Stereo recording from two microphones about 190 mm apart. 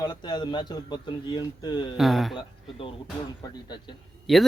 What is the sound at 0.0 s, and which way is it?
Speech, 20° left (ahead or behind).